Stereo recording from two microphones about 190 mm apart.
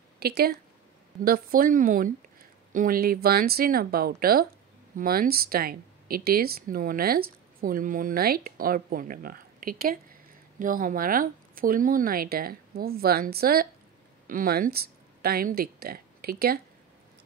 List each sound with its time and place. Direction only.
0.2 s speech: 55° right (ahead or behind)